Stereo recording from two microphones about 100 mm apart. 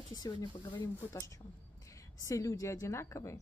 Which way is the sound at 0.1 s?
40° left (ahead or behind).